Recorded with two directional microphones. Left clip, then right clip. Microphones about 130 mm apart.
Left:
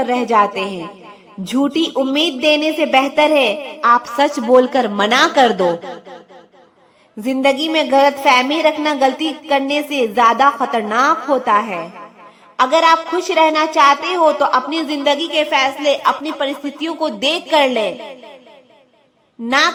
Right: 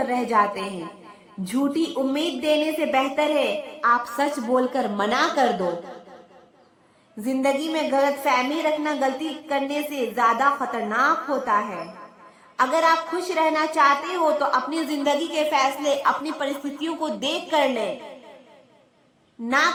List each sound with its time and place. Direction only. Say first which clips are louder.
0.1 s a woman's voice: left 8 dB; 35° left (ahead or behind)
3.9 s a woman's voice: left 8 dB; 35° left (ahead or behind)
7.3 s a woman's voice: left 7 dB; 35° left (ahead or behind)
12.5 s a woman's voice: left 7 dB; 35° left (ahead or behind)
15.0 s a woman's voice: left 7 dB; 15° left (ahead or behind); by 18.1 s 30° left (ahead or behind)
19.5 s a woman's voice: left 6 dB; 35° left (ahead or behind)